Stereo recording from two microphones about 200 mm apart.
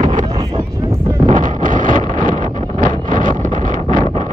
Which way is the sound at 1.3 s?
40° right (ahead or behind).